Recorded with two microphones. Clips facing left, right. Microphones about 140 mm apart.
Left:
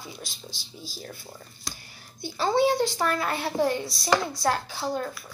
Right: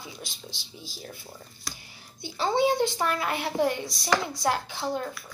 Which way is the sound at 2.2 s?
15° right (ahead or behind).